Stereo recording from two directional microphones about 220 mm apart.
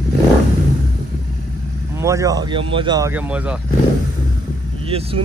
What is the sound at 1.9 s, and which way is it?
Speech, 15° right (ahead or behind).